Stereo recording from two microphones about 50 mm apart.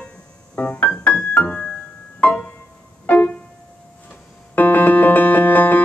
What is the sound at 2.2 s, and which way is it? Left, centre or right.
Music, left.